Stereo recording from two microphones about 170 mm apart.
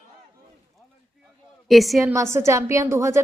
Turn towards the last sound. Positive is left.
turn(degrees=-15)  # may be behind; listen again after turning